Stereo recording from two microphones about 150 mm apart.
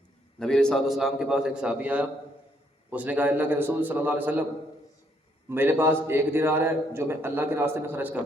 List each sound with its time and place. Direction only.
0.3 s a man's voice: 5° left (ahead or behind); by 4.4 s 10° right (ahead or behind)
5.5 s a man's voice: 15° right (ahead or behind)